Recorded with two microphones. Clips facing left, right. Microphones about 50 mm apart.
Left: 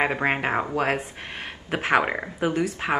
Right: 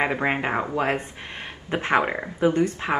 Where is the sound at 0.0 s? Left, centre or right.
Centre.